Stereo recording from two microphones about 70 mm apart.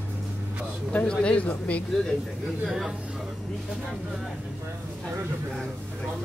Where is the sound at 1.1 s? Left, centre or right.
Centre.